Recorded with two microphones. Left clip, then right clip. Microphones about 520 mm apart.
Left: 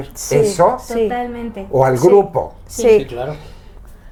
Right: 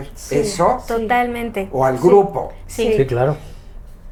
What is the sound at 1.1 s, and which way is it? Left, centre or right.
Speech, right.